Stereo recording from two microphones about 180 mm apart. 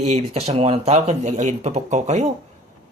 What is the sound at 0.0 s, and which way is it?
Speech, 35° right (ahead or behind).